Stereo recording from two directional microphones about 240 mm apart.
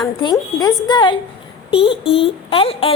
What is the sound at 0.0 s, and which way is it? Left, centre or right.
A woman's voice, centre.